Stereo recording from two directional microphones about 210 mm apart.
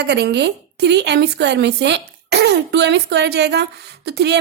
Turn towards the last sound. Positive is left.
turn(degrees=-50)  # may be behind; listen again after turning